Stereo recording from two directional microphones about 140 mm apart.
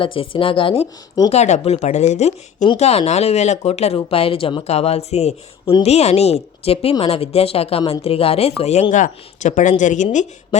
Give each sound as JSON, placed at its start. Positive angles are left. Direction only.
{"t": 0.0, "sound": "speech", "side_deg": 40}
{"t": 1.3, "sound": "speech", "side_deg": 55}